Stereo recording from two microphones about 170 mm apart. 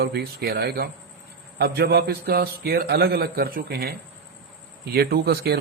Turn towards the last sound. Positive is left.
turn(degrees=-70)  # may be behind; listen again after turning